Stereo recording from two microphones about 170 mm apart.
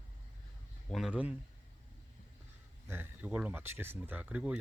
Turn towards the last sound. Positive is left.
turn(degrees=-5)  # may be behind; listen again after turning